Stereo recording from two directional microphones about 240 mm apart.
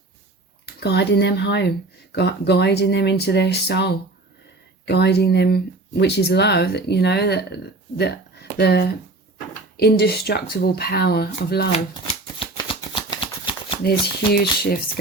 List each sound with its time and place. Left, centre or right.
0.6 s speech: left
12.4 s a sound: left
14.3 s speech: left